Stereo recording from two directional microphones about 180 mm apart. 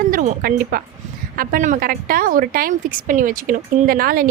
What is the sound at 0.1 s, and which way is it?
A woman's voice, 50° right (ahead or behind).